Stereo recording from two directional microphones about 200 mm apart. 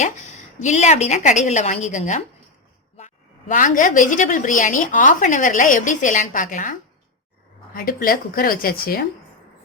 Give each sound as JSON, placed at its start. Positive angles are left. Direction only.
{"t": 0.6, "sound": "a woman's voice", "side_deg": 35}
{"t": 3.5, "sound": "a woman's voice", "side_deg": 40}